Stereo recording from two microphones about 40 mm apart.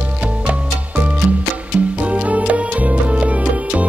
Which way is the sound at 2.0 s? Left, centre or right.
Right.